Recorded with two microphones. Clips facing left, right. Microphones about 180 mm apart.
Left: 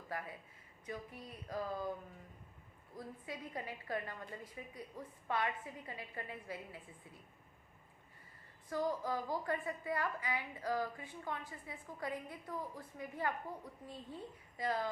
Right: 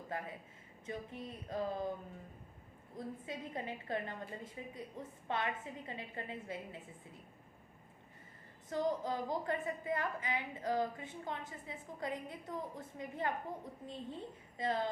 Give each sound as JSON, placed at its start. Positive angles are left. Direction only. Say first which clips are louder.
{"t": 0.1, "sound": "a sound", "louder": "right 1 dB", "side_deg": -25}
{"t": 0.9, "sound": "a woman's voice", "louder": "right 3 dB", "side_deg": -25}
{"t": 2.9, "sound": "a woman's voice", "louder": "right 3 dB", "side_deg": -25}
{"t": 8.7, "sound": "a woman's voice", "louder": "right 1 dB", "side_deg": -20}